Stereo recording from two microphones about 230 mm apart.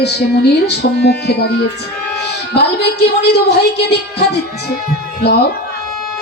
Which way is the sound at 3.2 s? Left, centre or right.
Left.